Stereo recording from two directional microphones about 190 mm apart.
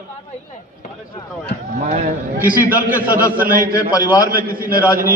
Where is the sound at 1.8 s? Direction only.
35° right (ahead or behind).